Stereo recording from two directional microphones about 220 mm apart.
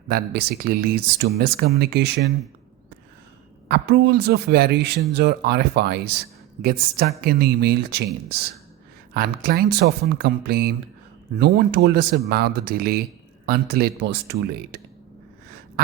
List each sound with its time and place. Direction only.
0.1 s speech: 45° right (ahead or behind)
3.7 s speech: 50° right (ahead or behind)